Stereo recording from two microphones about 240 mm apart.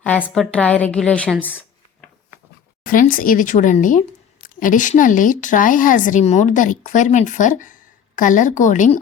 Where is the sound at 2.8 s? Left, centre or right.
Left.